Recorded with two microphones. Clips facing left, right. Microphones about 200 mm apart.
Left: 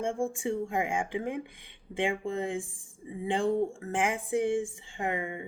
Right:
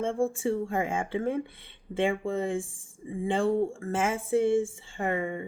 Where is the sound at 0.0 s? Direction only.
15° left (ahead or behind).